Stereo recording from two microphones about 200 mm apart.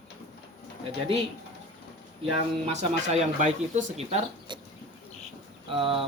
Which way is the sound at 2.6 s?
35° right (ahead or behind).